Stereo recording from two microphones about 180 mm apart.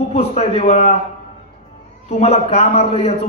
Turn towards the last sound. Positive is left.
turn(degrees=35)  # may be behind; listen again after turning